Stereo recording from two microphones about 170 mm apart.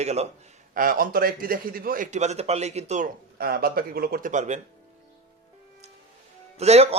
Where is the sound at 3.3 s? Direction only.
65° right (ahead or behind); by 4.6 s 45° right (ahead or behind).